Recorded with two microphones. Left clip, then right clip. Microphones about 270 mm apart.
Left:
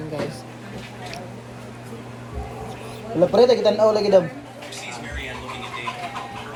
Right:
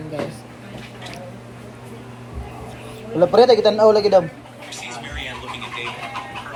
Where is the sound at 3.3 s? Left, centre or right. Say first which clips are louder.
Right 3 dB; right.